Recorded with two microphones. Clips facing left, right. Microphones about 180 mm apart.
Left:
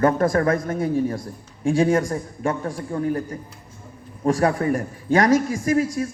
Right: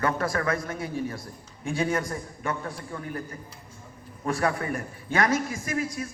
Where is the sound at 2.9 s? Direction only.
40° left (ahead or behind).